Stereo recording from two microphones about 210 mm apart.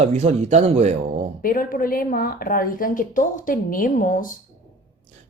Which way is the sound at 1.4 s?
40° left (ahead or behind).